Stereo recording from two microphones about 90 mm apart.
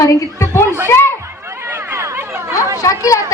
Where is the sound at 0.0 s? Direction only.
30° left (ahead or behind).